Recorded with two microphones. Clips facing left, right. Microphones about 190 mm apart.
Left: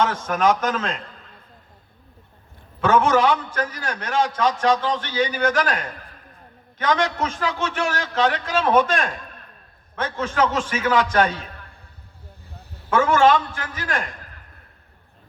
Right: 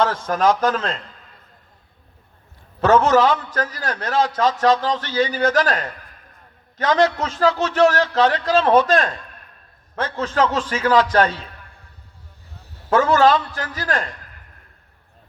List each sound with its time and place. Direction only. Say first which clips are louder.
0.3 s a man's voice: right 1 dB; 35° right (ahead or behind)
2.8 s a man's voice: right 3 dB; 40° right (ahead or behind)
12.9 s a man's voice: right 2 dB; 35° right (ahead or behind)